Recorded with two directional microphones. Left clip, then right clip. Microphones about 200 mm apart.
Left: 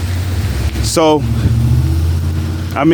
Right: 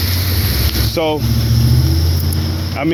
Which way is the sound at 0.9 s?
50° left (ahead or behind).